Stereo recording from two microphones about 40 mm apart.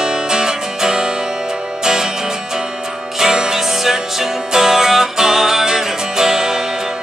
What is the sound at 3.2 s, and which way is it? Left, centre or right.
Music, centre.